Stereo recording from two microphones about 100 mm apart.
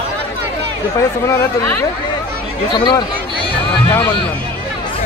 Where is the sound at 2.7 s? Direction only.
50° left (ahead or behind).